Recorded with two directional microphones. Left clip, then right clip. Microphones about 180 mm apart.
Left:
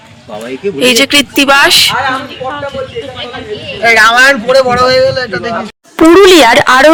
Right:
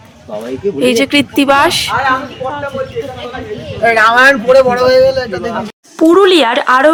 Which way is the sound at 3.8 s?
40° right (ahead or behind).